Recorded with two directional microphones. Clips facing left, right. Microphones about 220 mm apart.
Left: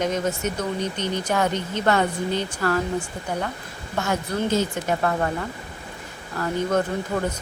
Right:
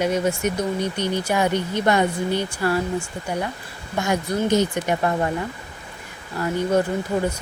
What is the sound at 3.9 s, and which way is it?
Speech, 15° right (ahead or behind).